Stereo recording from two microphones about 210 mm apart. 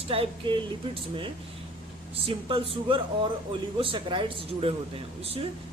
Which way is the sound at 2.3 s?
25° right (ahead or behind).